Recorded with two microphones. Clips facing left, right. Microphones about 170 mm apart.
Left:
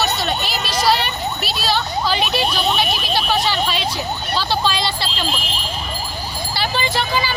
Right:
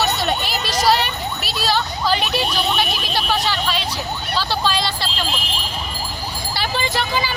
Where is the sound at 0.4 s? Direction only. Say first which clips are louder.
Even; 45° right (ahead or behind).